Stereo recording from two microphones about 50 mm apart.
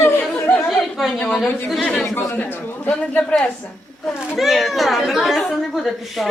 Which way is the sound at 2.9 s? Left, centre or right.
Left.